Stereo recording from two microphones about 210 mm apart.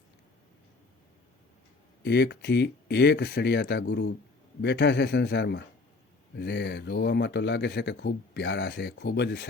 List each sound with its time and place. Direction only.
2.0 s a man's voice: 50° left (ahead or behind)